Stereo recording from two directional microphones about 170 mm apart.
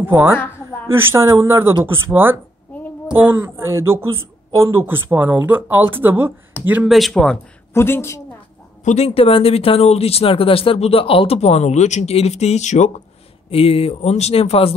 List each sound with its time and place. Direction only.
0.0 s speech: 10° right (ahead or behind)
7.7 s a woman's voice: 15° left (ahead or behind)
8.8 s speech: 35° left (ahead or behind)